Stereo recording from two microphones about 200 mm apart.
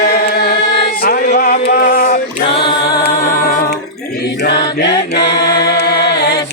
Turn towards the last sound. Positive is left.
turn(degrees=55)  # may be behind; listen again after turning